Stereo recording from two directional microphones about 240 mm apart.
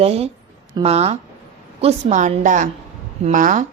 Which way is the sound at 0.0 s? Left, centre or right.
Right.